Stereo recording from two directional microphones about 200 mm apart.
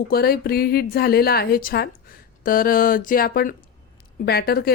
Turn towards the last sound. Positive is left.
turn(degrees=50)  # may be behind; listen again after turning